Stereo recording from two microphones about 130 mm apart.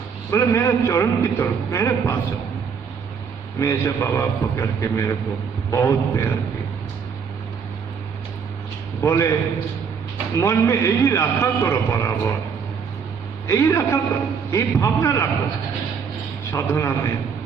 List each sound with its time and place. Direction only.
0.3 s a man's voice: 25° left (ahead or behind)
3.5 s a man's voice: 25° left (ahead or behind)
9.0 s a man's voice: 25° left (ahead or behind)
13.5 s a man's voice: 20° left (ahead or behind)
16.6 s a man's voice: 25° left (ahead or behind)